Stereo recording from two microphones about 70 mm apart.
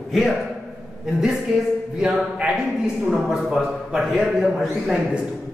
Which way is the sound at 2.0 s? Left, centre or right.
Centre.